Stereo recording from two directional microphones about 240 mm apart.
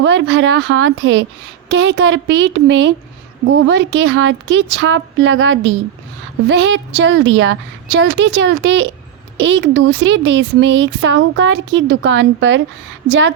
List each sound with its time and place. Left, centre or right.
0.0 s speech: right